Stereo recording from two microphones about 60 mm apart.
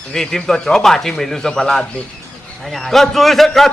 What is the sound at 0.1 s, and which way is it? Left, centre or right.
A man's voice, centre.